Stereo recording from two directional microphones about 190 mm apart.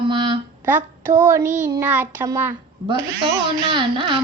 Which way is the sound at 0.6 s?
10° right (ahead or behind).